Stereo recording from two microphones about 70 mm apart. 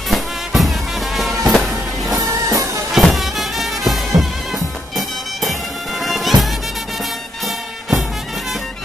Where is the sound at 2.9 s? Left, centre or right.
Centre.